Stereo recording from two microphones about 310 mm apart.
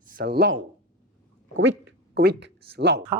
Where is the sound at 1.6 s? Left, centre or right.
Right.